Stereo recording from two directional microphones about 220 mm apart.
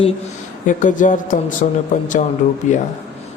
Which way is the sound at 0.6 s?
35° left (ahead or behind).